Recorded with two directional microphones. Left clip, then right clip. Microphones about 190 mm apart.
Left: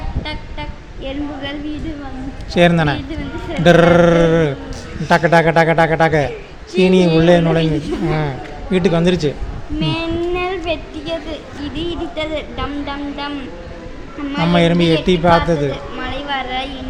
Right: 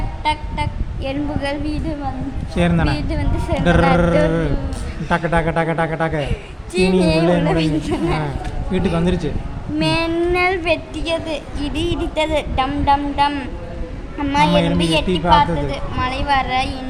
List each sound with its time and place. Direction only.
0.3 s speech: 20° right (ahead or behind)
2.5 s a man's voice: 25° left (ahead or behind)
7.6 s speech: 30° right (ahead or behind)
8.7 s a man's voice: 20° left (ahead or behind)
9.8 s child singing: 35° right (ahead or behind)
10.7 s a woman's voice: 20° right (ahead or behind)
14.5 s a man's voice: 25° left (ahead or behind)
15.7 s a woman's voice: 20° right (ahead or behind)